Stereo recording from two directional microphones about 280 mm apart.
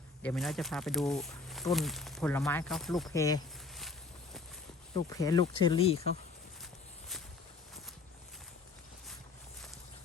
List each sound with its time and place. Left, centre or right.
0.2 s speech: centre
3.1 s speech: centre
4.9 s speech: centre